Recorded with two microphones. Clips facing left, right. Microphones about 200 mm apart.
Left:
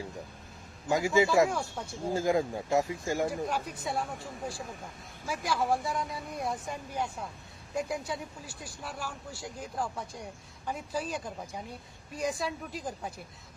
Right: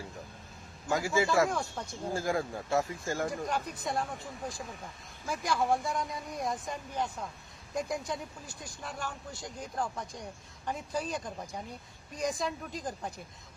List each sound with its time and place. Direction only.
0.9 s a man's voice: 20° left (ahead or behind)
1.5 s speech: 5° left (ahead or behind)
2.0 s speech: 20° left (ahead or behind)
5.2 s speech: 5° left (ahead or behind)